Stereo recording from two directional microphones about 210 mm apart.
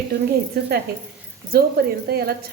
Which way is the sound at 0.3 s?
50° right (ahead or behind).